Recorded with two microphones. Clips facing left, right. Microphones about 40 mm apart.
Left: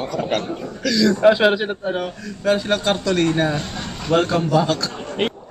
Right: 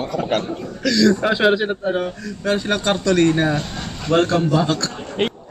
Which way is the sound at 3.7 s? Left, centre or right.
Centre.